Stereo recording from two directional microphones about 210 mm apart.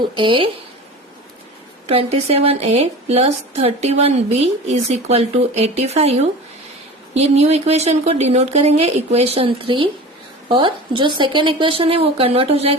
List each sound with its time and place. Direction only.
0.2 s a woman's voice: 25° right (ahead or behind)
1.9 s a woman's voice: 30° right (ahead or behind)